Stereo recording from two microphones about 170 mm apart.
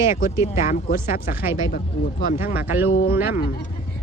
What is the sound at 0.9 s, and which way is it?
Speech, 60° left (ahead or behind).